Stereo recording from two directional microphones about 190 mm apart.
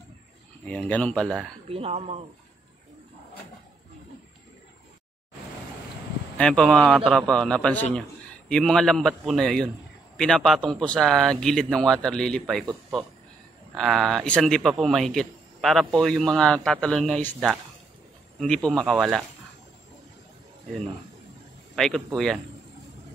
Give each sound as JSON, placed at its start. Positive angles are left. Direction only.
{"t": 0.7, "sound": "speech", "side_deg": 5}
{"t": 1.7, "sound": "speech", "side_deg": -30}
{"t": 6.3, "sound": "a man's voice", "side_deg": 5}
{"t": 13.7, "sound": "a man's voice", "side_deg": 0}
{"t": 18.4, "sound": "a man's voice", "side_deg": 5}
{"t": 21.7, "sound": "a man's voice", "side_deg": 0}